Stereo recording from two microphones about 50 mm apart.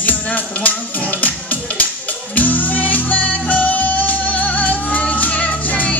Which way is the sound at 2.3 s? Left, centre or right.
Left.